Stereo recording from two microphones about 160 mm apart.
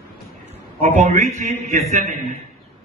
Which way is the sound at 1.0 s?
50° right (ahead or behind).